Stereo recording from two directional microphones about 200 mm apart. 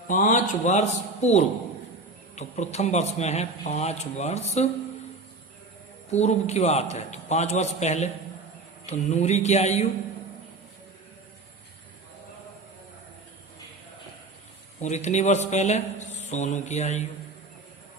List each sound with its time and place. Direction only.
0.1 s a man's voice: 40° left (ahead or behind)
6.1 s a man's voice: 35° left (ahead or behind)
14.8 s a man's voice: 35° left (ahead or behind)